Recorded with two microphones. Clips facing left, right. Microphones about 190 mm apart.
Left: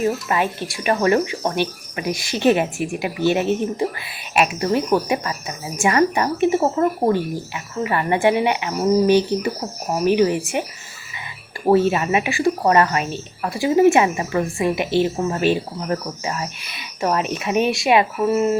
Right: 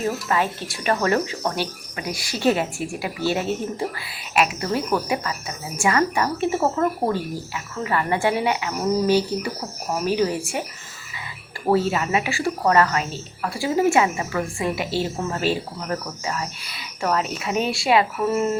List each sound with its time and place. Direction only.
0.3 s a woman's voice: 15° left (ahead or behind)
11.7 s a woman's voice: 20° left (ahead or behind)